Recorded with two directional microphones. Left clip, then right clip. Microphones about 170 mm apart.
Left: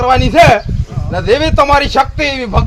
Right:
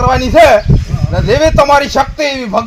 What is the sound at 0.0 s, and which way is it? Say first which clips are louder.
Speech: right 1 dB; 15° left (ahead or behind).